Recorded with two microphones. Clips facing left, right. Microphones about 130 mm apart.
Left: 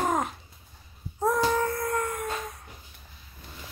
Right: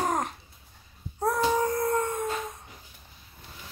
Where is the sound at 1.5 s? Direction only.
15° right (ahead or behind).